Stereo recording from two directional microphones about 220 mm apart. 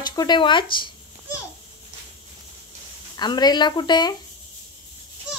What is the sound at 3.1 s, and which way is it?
Speech, 20° left (ahead or behind).